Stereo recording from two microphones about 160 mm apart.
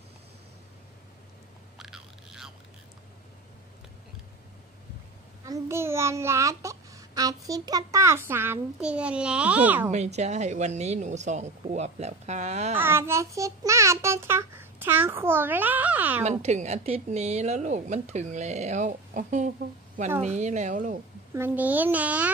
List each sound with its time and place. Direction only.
1.8 s biting: 5° right (ahead or behind)
5.4 s a child's voice: 20° right (ahead or behind)
9.8 s speech: 45° right (ahead or behind)
12.7 s a child's voice: 15° right (ahead or behind)
16.3 s speech: 45° right (ahead or behind)
21.3 s a child's voice: 10° right (ahead or behind)